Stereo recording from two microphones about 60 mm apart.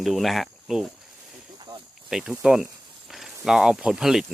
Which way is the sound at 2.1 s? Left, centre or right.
Centre.